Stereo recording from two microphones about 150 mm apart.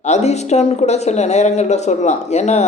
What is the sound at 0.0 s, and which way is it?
Speech, 50° left (ahead or behind).